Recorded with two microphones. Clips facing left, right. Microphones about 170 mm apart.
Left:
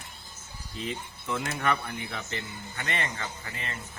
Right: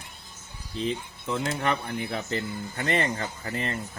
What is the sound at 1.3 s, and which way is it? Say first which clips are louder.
Speech: right 2 dB; 25° right (ahead or behind).